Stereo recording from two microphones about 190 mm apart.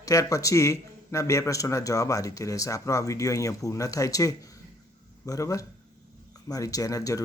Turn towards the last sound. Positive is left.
turn(degrees=15)  # may be behind; listen again after turning